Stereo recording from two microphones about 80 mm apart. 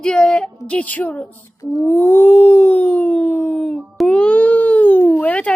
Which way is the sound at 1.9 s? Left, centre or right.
Left.